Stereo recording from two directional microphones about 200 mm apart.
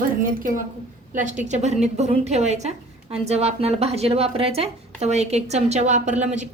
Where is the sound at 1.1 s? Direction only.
40° right (ahead or behind).